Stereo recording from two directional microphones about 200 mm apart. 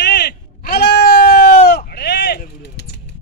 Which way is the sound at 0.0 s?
55° left (ahead or behind).